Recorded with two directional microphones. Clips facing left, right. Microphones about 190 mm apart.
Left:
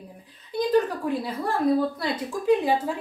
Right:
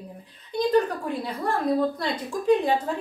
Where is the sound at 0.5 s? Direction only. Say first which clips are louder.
Right 1 dB; 5° left (ahead or behind).